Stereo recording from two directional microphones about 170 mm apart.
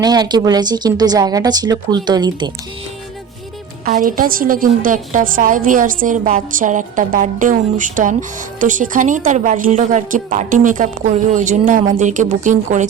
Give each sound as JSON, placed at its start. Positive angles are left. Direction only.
{"t": 0.0, "sound": "speech", "side_deg": -25}
{"t": 3.8, "sound": "a woman's voice", "side_deg": -55}